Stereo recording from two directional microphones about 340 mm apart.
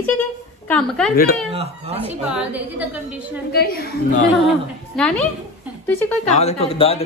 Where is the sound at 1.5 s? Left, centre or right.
Centre.